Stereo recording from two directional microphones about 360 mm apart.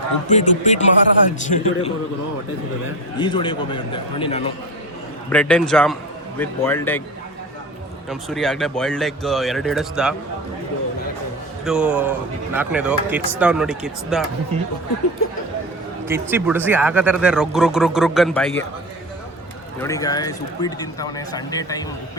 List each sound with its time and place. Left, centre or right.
0.3 s a man's voice: centre
3.2 s speech: centre
5.3 s speech: centre
8.1 s speech: centre
11.6 s speech: centre
16.0 s speech: centre
19.8 s speech: centre